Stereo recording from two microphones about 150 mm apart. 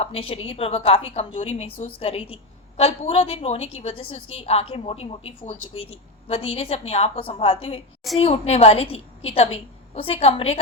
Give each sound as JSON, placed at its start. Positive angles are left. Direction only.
{"t": 0.0, "sound": "a woman's voice", "side_deg": 40}